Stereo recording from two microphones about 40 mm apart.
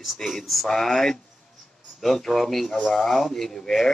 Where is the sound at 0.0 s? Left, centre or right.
Centre.